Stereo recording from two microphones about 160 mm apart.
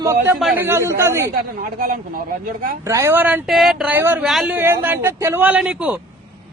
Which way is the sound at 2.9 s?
20° right (ahead or behind).